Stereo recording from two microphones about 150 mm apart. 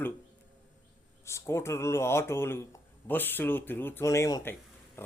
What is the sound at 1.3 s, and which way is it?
A man's voice, 20° left (ahead or behind).